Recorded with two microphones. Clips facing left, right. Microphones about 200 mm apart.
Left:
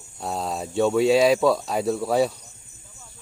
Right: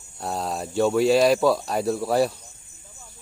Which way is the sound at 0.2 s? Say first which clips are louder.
Even; centre (ahead or behind).